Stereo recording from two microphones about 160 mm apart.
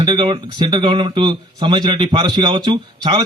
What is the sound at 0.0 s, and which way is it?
Speech, 30° right (ahead or behind).